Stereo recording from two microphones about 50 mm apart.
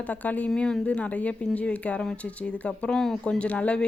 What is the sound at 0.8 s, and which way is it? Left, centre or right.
Speech, left.